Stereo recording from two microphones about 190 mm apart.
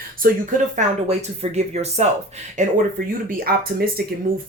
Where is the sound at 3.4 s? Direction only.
50° right (ahead or behind).